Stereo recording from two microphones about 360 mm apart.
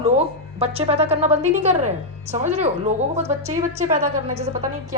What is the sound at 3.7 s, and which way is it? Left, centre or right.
Speech, centre.